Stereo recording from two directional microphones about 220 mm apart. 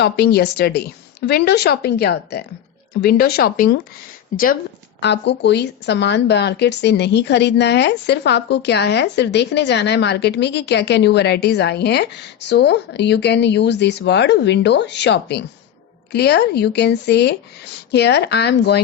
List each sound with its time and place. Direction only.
0.0 s a woman's voice: 45° left (ahead or behind)
4.9 s a woman's voice: 50° left (ahead or behind)